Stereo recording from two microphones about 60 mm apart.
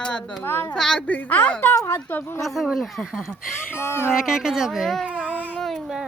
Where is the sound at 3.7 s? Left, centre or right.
Left.